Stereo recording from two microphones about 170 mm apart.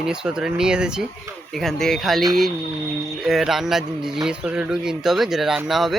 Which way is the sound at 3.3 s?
Centre (ahead or behind).